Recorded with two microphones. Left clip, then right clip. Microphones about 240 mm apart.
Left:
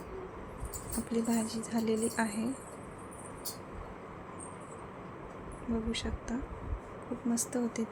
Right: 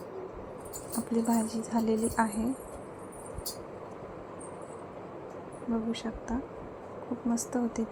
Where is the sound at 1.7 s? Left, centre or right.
Centre.